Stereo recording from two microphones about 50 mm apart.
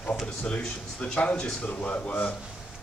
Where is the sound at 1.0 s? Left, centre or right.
Left.